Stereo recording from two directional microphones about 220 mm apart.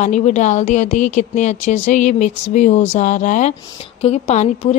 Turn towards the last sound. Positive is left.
turn(degrees=30)  # may be behind; listen again after turning